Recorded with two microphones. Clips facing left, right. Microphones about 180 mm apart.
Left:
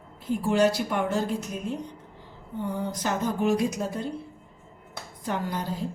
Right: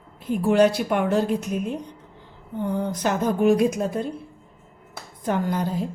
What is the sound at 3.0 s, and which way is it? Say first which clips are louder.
Speech: right 5 dB; 60° right (ahead or behind).